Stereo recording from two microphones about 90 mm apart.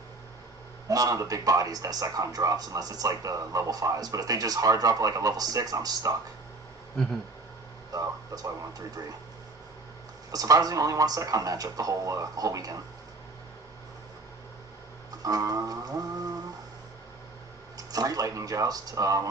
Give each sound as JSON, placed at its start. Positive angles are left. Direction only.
{"t": 0.9, "sound": "speech", "side_deg": -40}
{"t": 7.9, "sound": "speech", "side_deg": -40}
{"t": 10.3, "sound": "speech", "side_deg": -40}
{"t": 15.2, "sound": "a sound", "side_deg": -45}
{"t": 17.7, "sound": "speech", "side_deg": -45}